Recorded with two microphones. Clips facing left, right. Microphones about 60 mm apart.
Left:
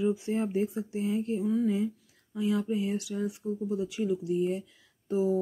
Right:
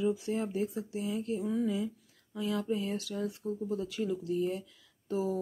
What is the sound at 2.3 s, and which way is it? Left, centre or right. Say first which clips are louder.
Speech: left 4 dB; left.